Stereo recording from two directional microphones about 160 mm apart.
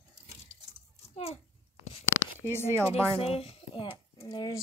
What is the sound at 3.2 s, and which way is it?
Speech, 35° left (ahead or behind).